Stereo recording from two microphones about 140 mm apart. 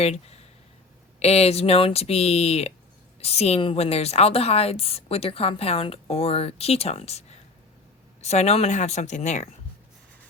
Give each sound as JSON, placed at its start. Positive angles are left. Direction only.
{"t": 0.0, "sound": "a woman's voice", "side_deg": 50}